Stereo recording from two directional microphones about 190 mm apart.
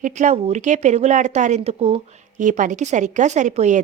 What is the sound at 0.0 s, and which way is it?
A woman's voice, 40° right (ahead or behind).